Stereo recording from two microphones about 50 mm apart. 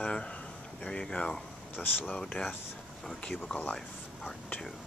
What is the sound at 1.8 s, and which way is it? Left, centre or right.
Speech, left.